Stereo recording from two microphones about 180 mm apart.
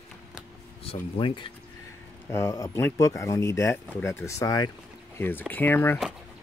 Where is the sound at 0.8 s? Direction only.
30° left (ahead or behind).